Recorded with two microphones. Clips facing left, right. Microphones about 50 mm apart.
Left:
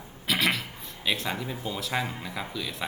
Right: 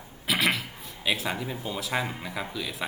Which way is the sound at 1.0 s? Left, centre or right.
Centre.